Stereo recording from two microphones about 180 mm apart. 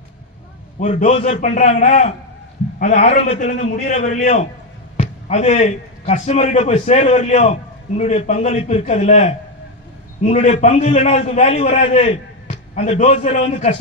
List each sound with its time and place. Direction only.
0.7 s a man's voice: 40° left (ahead or behind)
2.8 s a man's voice: 50° left (ahead or behind)
3.2 s a man's voice: 40° left (ahead or behind)